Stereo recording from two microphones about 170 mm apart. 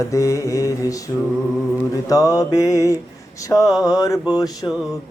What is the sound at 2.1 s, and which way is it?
Speech, 20° left (ahead or behind).